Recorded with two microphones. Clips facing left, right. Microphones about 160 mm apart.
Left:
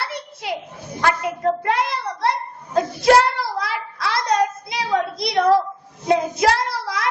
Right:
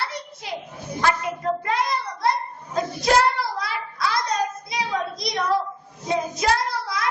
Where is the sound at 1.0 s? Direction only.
65° left (ahead or behind).